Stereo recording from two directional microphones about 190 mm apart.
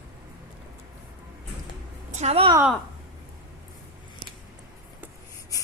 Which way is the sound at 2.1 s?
35° right (ahead or behind).